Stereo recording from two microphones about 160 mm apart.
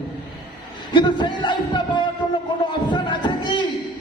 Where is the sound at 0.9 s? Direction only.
30° left (ahead or behind).